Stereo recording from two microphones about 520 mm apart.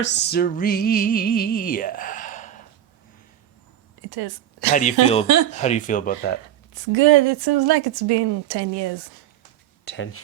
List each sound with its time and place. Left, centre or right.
0.0 s music: centre
4.0 s speech: right
4.7 s music: centre
6.7 s a woman's voice: right
9.8 s speech: left